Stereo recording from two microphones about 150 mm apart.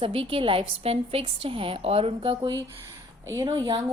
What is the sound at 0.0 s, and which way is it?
A woman's voice, 40° right (ahead or behind).